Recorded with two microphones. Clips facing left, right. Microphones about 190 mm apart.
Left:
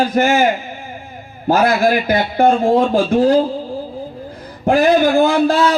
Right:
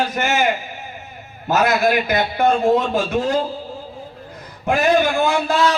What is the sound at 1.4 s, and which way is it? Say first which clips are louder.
Music: left 3 dB; 35° left (ahead or behind).